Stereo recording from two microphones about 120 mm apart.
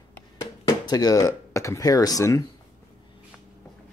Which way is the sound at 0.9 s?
35° left (ahead or behind).